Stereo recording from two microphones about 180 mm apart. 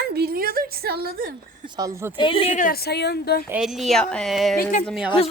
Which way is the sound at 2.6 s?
55° left (ahead or behind).